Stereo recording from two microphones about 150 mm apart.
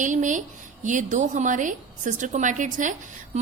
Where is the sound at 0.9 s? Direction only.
55° right (ahead or behind).